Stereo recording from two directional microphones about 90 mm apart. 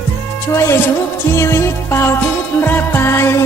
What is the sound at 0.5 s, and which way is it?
Music, 35° left (ahead or behind).